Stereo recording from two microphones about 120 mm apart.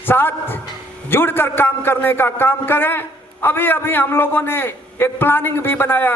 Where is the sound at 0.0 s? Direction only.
15° left (ahead or behind).